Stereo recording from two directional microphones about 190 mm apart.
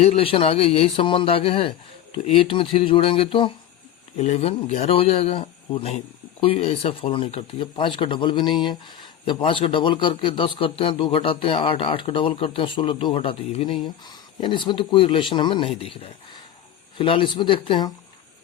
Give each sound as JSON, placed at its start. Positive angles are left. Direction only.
{"t": 0.0, "sound": "a man's voice", "side_deg": 30}